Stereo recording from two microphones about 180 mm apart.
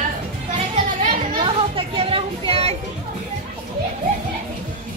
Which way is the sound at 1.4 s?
30° right (ahead or behind).